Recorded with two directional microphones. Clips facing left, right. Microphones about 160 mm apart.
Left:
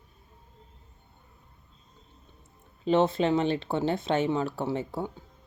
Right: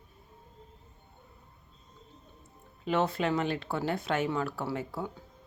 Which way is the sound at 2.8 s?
25° left (ahead or behind).